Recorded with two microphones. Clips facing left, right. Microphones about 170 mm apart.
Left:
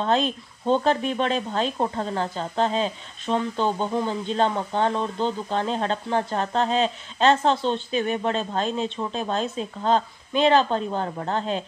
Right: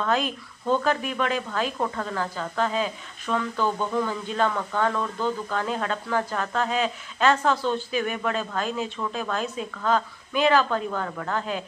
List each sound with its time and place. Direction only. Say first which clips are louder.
0.0 s speech: left 3 dB; 25° left (ahead or behind)